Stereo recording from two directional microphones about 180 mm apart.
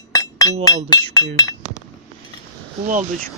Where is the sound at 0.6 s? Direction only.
20° left (ahead or behind).